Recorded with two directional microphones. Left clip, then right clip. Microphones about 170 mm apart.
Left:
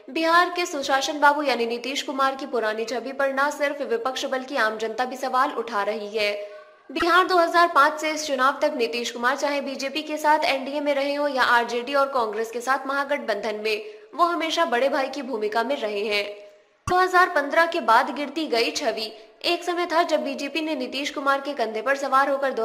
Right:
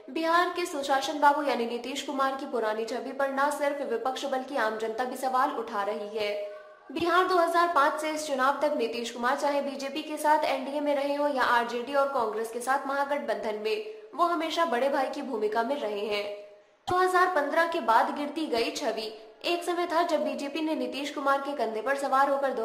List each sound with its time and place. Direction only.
0.1 s a woman's voice: 20° left (ahead or behind)